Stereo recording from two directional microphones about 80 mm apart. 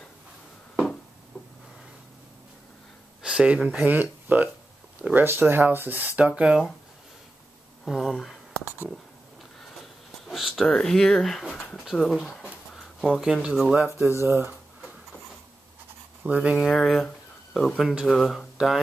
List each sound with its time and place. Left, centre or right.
1.3 s a sound: centre
3.2 s speech: centre
3.8 s speech: right
7.8 s speech: centre
10.2 s a sound: centre
10.7 s speech: centre
12.2 s a sound: centre
13.3 s speech: centre
13.8 s speech: right
16.3 s speech: centre
16.5 s speech: centre